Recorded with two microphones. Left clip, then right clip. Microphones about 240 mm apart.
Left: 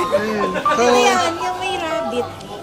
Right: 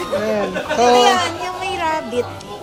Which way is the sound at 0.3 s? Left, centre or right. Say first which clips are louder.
Left 2 dB; centre.